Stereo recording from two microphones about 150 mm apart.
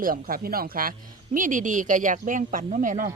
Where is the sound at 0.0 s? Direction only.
70° right (ahead or behind).